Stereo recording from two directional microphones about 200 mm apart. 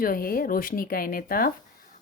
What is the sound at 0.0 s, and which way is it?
A woman's voice, 45° left (ahead or behind).